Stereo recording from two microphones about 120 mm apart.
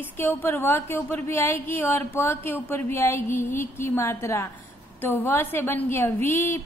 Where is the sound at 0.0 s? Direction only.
20° left (ahead or behind).